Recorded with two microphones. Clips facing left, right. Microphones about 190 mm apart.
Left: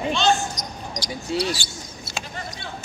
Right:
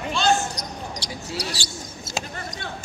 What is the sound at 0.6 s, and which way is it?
Basketball bounce, 65° right (ahead or behind).